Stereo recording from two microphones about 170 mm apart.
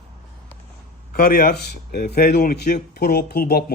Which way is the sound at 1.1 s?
60° left (ahead or behind).